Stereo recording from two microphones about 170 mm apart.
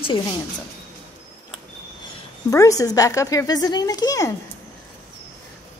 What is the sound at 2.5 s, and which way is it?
Speech, 20° left (ahead or behind).